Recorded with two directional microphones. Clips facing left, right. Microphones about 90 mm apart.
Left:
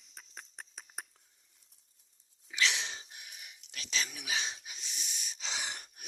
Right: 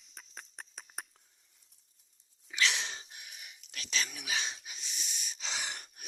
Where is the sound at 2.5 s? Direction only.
Centre (ahead or behind).